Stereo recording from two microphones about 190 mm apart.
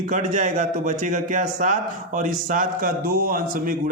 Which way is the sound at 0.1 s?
40° right (ahead or behind).